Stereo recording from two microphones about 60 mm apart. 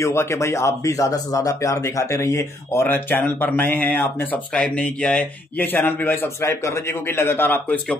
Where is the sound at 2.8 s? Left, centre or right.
Left.